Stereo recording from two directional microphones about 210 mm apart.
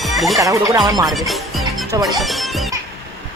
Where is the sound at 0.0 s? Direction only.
Centre (ahead or behind).